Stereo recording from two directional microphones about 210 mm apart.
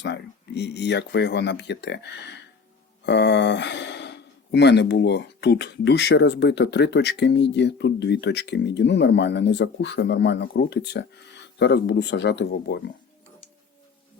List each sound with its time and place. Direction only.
0.0 s speech: 55° left (ahead or behind)